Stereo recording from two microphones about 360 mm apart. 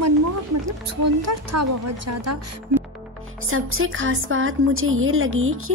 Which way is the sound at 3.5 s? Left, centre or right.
Right.